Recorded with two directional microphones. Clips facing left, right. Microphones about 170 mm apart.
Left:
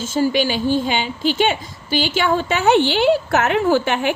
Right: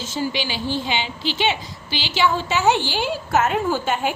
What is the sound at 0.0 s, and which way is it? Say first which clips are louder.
A woman's voice: left 7 dB; 50° left (ahead or behind).